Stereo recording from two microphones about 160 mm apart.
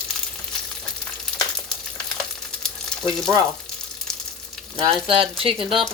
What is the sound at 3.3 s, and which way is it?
Frying, 20° right (ahead or behind).